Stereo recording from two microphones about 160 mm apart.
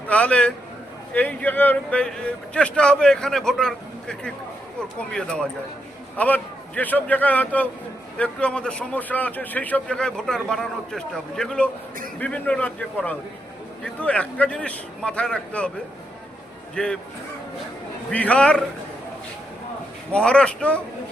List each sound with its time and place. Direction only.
0.1 s a man's voice: 5° left (ahead or behind)
16.7 s a man's voice: 5° left (ahead or behind)
18.1 s a man's voice: 10° left (ahead or behind)
20.1 s a man's voice: 5° left (ahead or behind)